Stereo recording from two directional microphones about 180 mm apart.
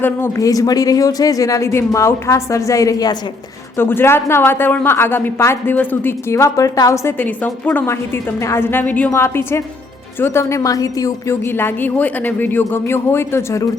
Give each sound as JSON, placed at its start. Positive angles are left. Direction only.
{"t": 0.0, "sound": "speech", "side_deg": 15}